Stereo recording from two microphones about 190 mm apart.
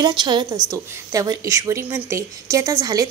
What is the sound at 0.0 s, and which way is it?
A woman's voice, 25° right (ahead or behind).